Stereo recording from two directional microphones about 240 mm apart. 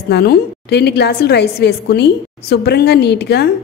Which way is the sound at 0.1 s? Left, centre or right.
Left.